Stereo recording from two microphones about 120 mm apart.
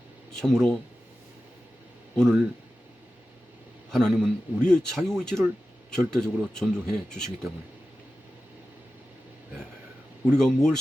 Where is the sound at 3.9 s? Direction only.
5° left (ahead or behind).